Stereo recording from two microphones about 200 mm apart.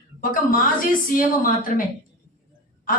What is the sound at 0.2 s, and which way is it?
A woman's voice, 45° left (ahead or behind).